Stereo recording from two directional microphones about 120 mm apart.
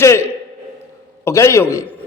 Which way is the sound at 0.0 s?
25° left (ahead or behind).